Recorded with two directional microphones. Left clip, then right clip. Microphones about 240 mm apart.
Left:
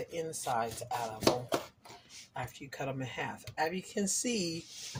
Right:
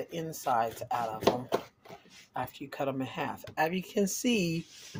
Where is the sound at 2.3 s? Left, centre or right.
Right.